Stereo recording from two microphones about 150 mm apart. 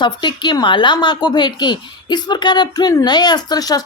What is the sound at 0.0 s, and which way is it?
A woman's voice, 30° left (ahead or behind).